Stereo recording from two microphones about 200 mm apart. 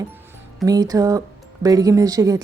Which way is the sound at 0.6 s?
20° right (ahead or behind).